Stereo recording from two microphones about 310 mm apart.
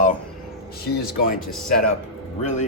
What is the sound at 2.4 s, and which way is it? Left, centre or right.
Speech, left.